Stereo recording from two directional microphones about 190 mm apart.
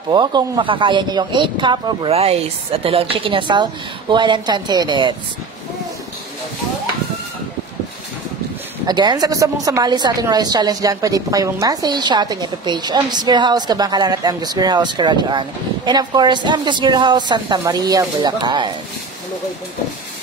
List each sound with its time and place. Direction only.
0.1 s a woman's voice: 20° right (ahead or behind)
8.8 s a woman's voice: 20° right (ahead or behind)